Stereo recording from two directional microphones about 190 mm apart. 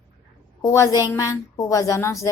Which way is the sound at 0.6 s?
15° left (ahead or behind).